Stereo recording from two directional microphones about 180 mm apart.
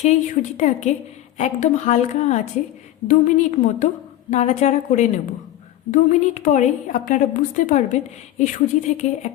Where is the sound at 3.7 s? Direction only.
40° left (ahead or behind).